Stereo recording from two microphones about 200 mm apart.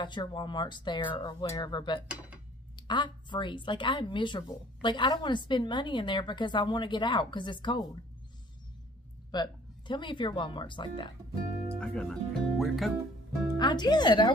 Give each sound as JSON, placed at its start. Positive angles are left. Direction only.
{"t": 0.0, "sound": "a woman's voice", "side_deg": 25}
{"t": 9.3, "sound": "a woman's voice", "side_deg": 20}
{"t": 11.8, "sound": "speech", "side_deg": 5}
{"t": 13.6, "sound": "a woman's voice", "side_deg": 20}